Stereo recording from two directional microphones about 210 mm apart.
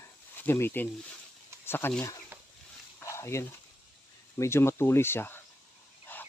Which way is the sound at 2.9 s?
15° left (ahead or behind).